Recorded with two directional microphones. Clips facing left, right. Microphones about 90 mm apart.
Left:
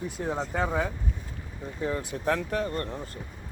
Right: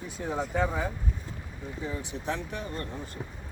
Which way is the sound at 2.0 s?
50° left (ahead or behind).